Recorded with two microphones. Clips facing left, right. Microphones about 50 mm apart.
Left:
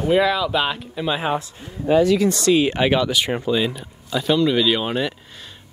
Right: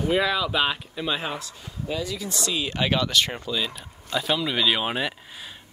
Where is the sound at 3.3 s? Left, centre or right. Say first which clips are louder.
Left 8 dB; left.